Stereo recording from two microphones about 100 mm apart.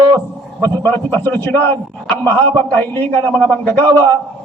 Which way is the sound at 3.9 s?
40° right (ahead or behind).